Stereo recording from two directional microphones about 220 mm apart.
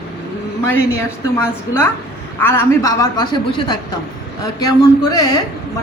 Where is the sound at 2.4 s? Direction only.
10° left (ahead or behind).